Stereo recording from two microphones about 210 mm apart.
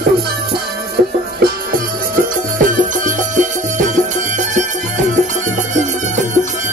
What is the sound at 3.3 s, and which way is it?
Music, 35° right (ahead or behind).